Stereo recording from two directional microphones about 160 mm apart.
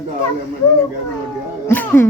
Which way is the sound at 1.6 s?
10° left (ahead or behind).